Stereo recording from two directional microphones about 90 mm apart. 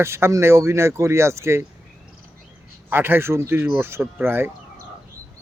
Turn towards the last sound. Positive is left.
turn(degrees=-25)  # may be behind; listen again after turning